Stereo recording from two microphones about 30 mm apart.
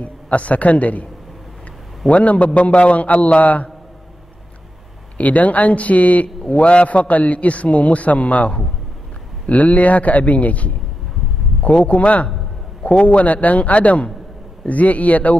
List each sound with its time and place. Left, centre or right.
0.0 s a man's voice: left
2.0 s a man's voice: left
5.1 s speech: left
6.2 s a man's voice: left
11.6 s speech: left
11.9 s a man's voice: left
13.2 s speech: left